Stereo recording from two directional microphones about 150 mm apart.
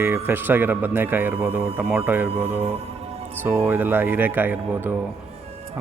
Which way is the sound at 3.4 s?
15° right (ahead or behind).